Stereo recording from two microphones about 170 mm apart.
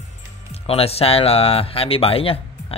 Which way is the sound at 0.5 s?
35° left (ahead or behind).